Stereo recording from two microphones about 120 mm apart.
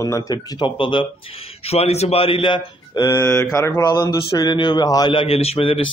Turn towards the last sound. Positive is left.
turn(degrees=50)  # may be behind; listen again after turning